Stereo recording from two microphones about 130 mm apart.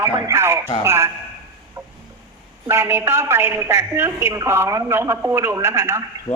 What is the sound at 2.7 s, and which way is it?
A man's voice, 20° right (ahead or behind).